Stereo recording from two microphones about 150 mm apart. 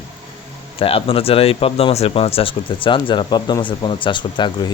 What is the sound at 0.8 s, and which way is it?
Speech, 40° left (ahead or behind).